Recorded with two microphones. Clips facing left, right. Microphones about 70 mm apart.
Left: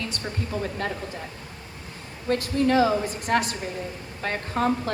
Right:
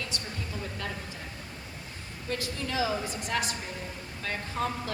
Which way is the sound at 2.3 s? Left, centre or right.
Left.